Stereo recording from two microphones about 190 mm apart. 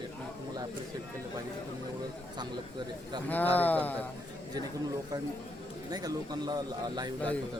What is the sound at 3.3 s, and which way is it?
Speech, 10° left (ahead or behind).